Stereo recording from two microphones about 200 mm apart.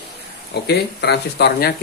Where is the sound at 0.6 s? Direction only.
55° left (ahead or behind).